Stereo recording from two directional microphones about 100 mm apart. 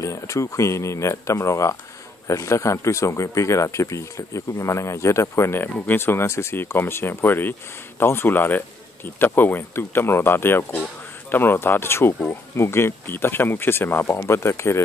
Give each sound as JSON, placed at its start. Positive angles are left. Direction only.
{"t": 0.0, "sound": "speech", "side_deg": 30}